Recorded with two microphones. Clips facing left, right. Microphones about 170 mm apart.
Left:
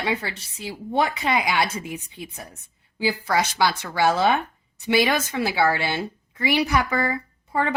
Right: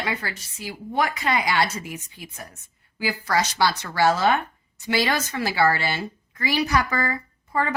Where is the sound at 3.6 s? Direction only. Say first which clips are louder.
Even; 15° left (ahead or behind).